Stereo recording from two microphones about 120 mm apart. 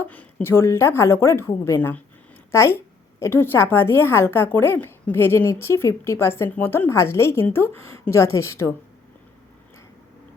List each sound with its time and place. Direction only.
0.1 s a woman's voice: 10° left (ahead or behind)